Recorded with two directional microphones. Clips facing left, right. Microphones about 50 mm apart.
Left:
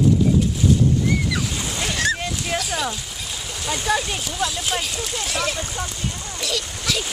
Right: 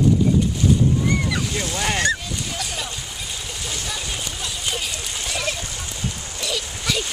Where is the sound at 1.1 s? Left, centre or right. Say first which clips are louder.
Even; centre.